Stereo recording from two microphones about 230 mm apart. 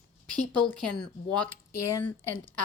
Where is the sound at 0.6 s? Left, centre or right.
Centre.